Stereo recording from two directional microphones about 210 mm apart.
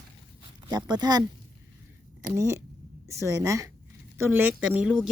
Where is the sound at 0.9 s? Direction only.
20° right (ahead or behind).